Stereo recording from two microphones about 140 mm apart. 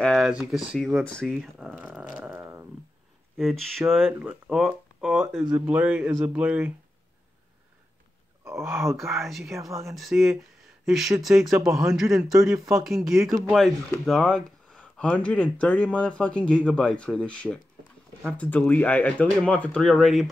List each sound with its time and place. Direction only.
0.0 s speech: centre (ahead or behind)
0.7 s a sound: centre (ahead or behind); by 2.6 s 15° right (ahead or behind)
3.3 s speech: centre (ahead or behind)
8.5 s a sound: 20° right (ahead or behind)
9.2 s speech: centre (ahead or behind)
9.7 s speech: 20° right (ahead or behind)
9.9 s speech: centre (ahead or behind)
12.5 s speech: 20° right (ahead or behind)
12.8 s speech: centre (ahead or behind)